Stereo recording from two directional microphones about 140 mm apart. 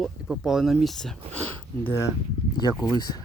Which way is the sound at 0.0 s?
5° right (ahead or behind).